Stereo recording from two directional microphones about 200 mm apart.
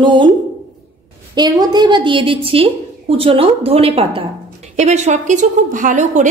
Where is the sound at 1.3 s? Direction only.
20° right (ahead or behind).